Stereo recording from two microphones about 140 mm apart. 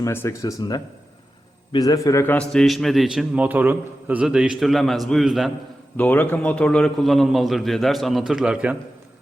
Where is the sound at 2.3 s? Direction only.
Centre (ahead or behind).